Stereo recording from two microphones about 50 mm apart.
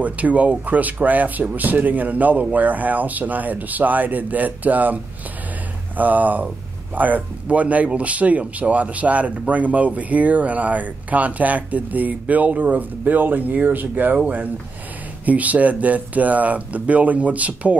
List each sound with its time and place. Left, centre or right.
0.0 s speech: right